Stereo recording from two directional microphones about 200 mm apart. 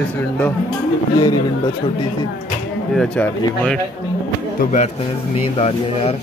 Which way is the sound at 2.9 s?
5° left (ahead or behind).